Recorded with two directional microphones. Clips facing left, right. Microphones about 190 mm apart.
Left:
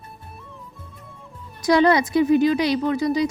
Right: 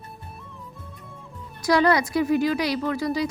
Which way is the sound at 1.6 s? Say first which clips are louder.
Left 3 dB; 20° left (ahead or behind).